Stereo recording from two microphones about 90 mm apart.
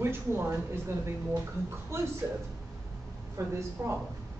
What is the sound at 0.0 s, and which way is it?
Speech, 25° right (ahead or behind).